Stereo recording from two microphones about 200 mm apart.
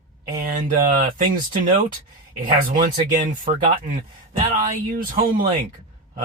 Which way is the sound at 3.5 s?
35° right (ahead or behind).